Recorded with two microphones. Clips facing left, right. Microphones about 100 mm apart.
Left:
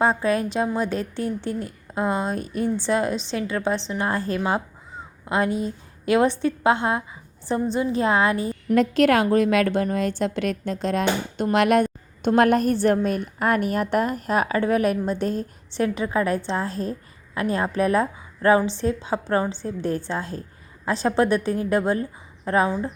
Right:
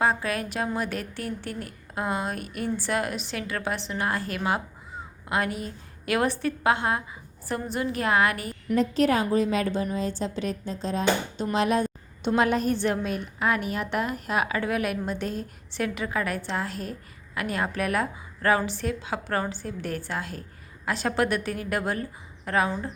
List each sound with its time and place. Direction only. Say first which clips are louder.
0.0 s a woman's voice: left 5 dB; 30° left (ahead or behind)
8.7 s a woman's voice: left 4 dB; 75° left (ahead or behind)
11.5 s a sound: left 6 dB; 65° left (ahead or behind)
12.3 s a woman's voice: left 5 dB; 55° left (ahead or behind); by 22.7 s 25° left (ahead or behind)